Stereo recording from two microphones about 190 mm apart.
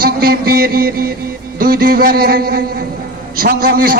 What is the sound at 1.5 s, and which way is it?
A man's voice, 50° right (ahead or behind).